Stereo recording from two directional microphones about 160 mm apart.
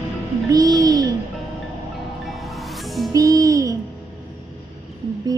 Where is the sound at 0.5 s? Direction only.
25° right (ahead or behind).